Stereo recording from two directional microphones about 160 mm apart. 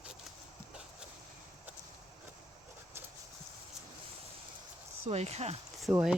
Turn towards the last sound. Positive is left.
turn(degrees=-10)  # may be behind; listen again after turning